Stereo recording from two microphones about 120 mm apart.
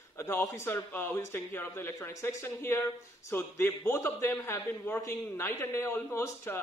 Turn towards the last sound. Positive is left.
turn(degrees=20)  # may be behind; listen again after turning